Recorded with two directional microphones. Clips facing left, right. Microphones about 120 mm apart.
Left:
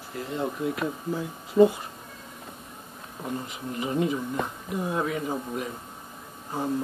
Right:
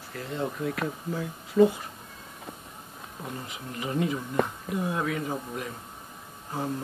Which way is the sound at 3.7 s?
25° left (ahead or behind).